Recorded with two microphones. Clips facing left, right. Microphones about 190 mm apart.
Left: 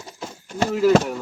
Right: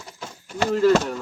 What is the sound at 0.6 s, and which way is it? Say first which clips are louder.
Speech: left 1 dB; 5° left (ahead or behind).